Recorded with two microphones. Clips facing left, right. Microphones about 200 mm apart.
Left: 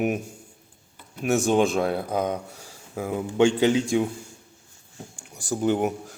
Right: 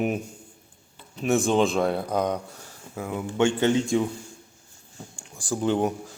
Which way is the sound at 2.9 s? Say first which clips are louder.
Left 3 dB; 25° left (ahead or behind).